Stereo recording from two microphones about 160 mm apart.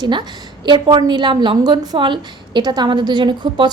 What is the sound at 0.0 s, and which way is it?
A woman's voice, 30° right (ahead or behind).